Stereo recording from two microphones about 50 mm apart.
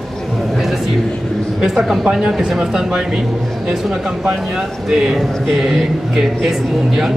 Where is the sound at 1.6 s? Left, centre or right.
Centre.